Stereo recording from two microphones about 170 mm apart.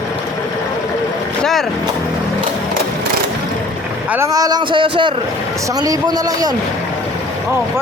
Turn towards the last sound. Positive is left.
turn(degrees=-20)  # may be behind; listen again after turning